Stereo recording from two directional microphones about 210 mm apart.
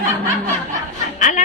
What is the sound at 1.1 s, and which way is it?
Speech, 35° left (ahead or behind).